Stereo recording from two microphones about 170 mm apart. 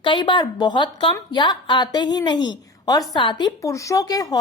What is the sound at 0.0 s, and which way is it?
Speech, 30° left (ahead or behind).